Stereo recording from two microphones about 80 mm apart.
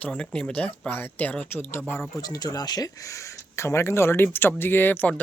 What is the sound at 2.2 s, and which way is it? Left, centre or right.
Speech, left.